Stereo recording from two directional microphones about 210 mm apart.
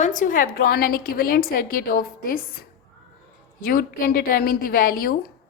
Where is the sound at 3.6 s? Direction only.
45° left (ahead or behind).